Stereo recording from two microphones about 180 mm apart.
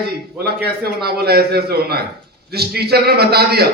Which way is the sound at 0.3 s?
60° right (ahead or behind).